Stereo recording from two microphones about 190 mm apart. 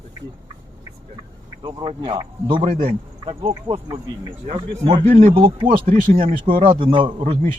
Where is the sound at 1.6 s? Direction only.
25° right (ahead or behind).